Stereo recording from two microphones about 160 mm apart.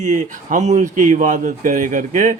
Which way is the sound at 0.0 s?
50° right (ahead or behind).